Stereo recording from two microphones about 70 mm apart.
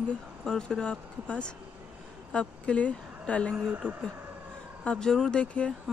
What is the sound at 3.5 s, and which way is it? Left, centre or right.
Speech, right.